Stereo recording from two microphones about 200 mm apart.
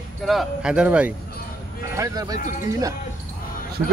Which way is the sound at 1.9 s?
15° right (ahead or behind).